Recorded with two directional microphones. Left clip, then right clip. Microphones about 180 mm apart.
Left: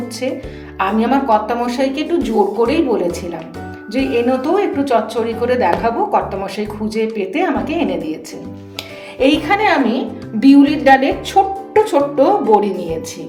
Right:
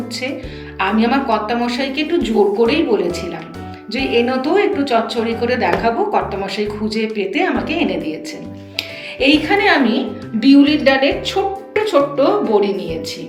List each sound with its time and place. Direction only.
0.8 s a woman's voice: 60° left (ahead or behind)